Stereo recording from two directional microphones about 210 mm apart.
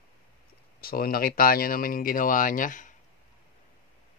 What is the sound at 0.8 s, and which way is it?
Speech, 45° left (ahead or behind).